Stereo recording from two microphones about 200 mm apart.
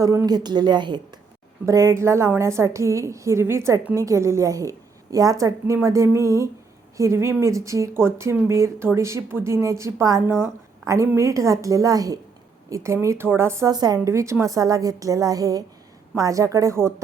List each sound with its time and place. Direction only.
0.0 s a woman's voice: 15° right (ahead or behind)